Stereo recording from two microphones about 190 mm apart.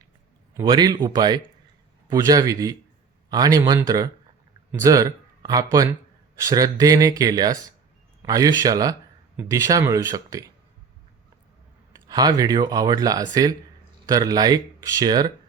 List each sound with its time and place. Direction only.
0.5 s speech: 20° right (ahead or behind)
11.9 s speech: 20° right (ahead or behind)